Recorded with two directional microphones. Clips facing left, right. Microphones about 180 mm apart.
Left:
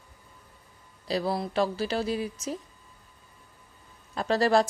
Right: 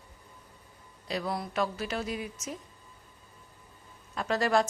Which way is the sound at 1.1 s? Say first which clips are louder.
Left 5 dB; 30° left (ahead or behind).